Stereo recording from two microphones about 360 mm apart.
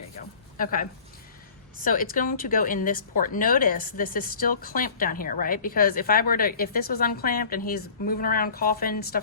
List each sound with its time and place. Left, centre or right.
0.5 s a woman's voice: left